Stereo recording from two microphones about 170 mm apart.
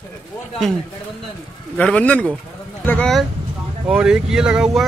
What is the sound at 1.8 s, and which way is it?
Speech, 5° left (ahead or behind).